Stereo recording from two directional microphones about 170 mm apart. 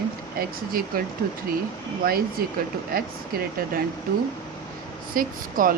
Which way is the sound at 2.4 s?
60° right (ahead or behind).